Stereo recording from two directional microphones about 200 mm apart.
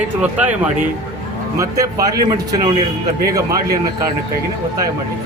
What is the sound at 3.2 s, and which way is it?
Speech, 15° right (ahead or behind).